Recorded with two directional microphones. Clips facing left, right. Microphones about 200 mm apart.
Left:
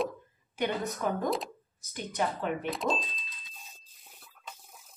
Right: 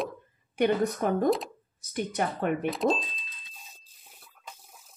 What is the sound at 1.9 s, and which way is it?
Speech, 55° right (ahead or behind).